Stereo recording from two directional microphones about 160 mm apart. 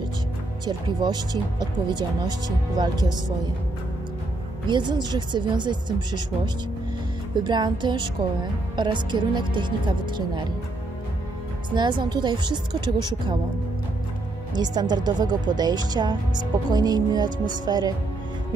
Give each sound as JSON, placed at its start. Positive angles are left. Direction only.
{"t": 0.7, "sound": "a woman's voice", "side_deg": -25}
{"t": 4.6, "sound": "a woman's voice", "side_deg": -30}
{"t": 11.7, "sound": "a woman's voice", "side_deg": -30}
{"t": 14.5, "sound": "a woman's voice", "side_deg": -25}